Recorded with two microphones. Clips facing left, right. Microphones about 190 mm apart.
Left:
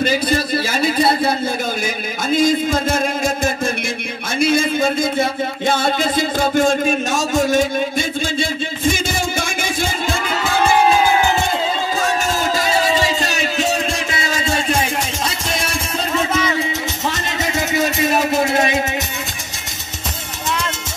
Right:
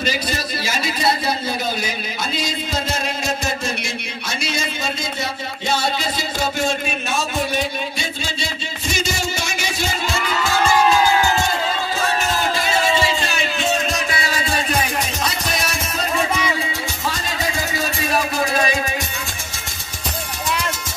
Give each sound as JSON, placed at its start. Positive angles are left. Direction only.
{"t": 0.0, "sound": "a man's voice", "side_deg": 55}
{"t": 2.3, "sound": "speech", "side_deg": 50}
{"t": 4.4, "sound": "a sound", "side_deg": 50}
{"t": 10.1, "sound": "crowd", "side_deg": 55}
{"t": 11.1, "sound": "crowd", "side_deg": 15}
{"t": 12.5, "sound": "music", "side_deg": 40}
{"t": 13.9, "sound": "music", "side_deg": 25}
{"t": 17.7, "sound": "a sound", "side_deg": 20}